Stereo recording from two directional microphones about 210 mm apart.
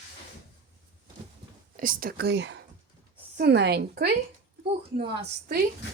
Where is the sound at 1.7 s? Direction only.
40° right (ahead or behind).